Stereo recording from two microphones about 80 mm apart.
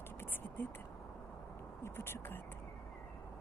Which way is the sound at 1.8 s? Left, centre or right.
Left.